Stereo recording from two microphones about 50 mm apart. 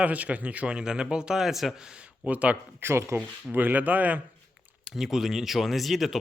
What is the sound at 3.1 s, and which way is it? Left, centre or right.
Speech, right.